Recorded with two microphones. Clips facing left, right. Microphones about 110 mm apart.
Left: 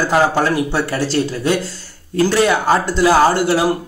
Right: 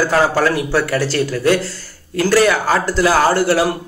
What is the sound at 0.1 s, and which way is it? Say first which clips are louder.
A man's voice: even; 25° left (ahead or behind).